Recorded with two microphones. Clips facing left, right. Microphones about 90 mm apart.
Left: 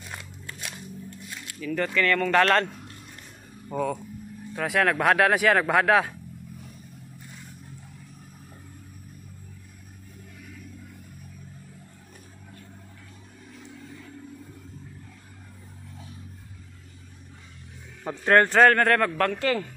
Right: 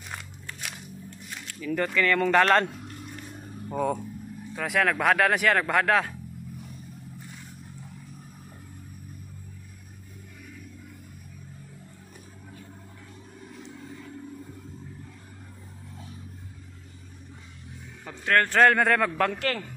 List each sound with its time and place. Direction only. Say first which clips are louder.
1.6 s speech: even; 10° right (ahead or behind)
4.6 s speech: left 2 dB; centre (ahead or behind)
18.0 s music: left 4 dB; 35° left (ahead or behind)
18.6 s speech: left 2 dB; centre (ahead or behind)